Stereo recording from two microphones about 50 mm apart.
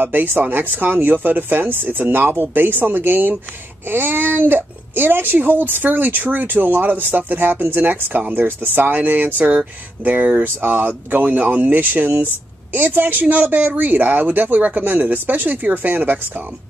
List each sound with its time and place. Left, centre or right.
0.0 s speech: right